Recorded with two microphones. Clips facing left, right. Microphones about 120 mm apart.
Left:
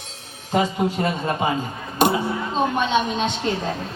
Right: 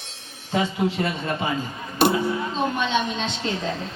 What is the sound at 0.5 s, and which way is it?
Speech, 45° left (ahead or behind).